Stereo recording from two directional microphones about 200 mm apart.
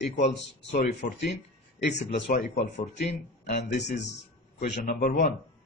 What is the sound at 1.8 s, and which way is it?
Speech, 60° left (ahead or behind).